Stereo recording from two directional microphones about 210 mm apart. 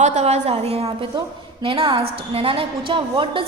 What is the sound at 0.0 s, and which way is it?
Speech, 30° right (ahead or behind).